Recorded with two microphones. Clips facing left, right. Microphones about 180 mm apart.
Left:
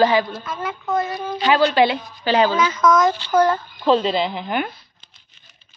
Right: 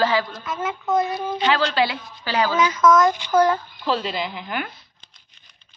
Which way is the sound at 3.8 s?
25° left (ahead or behind).